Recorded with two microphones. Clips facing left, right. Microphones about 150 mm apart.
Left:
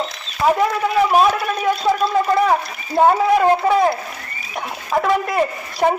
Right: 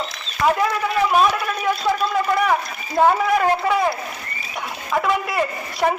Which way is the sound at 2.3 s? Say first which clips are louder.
Left 3 dB; 30° left (ahead or behind).